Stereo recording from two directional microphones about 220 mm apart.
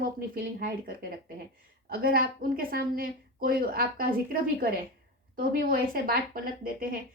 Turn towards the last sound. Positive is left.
turn(degrees=-40)  # may be behind; listen again after turning